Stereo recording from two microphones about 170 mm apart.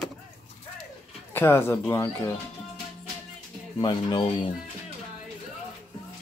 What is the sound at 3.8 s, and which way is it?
Speech, 30° left (ahead or behind).